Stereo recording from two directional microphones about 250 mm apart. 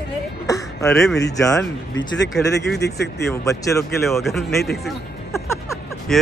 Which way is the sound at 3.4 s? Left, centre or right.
Centre.